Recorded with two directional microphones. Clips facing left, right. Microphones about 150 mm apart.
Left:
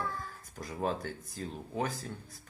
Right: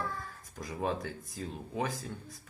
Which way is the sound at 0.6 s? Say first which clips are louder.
Even; centre (ahead or behind).